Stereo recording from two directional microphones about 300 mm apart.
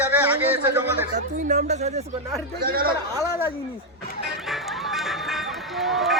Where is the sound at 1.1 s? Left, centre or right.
Right.